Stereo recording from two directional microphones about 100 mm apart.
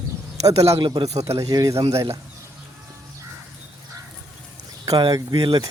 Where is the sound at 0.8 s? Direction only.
55° right (ahead or behind).